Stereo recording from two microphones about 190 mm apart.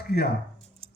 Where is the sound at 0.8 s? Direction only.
30° right (ahead or behind).